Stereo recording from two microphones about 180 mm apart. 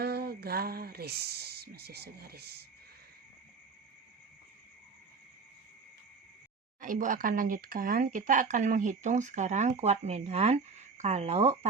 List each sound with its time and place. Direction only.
0.0 s speech: 60° right (ahead or behind)
6.8 s speech: 45° right (ahead or behind)